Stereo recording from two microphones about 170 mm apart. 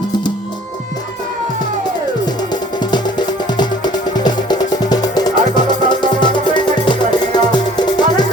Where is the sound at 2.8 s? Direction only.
25° left (ahead or behind).